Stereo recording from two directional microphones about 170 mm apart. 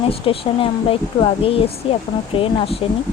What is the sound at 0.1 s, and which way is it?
Speech, 35° left (ahead or behind).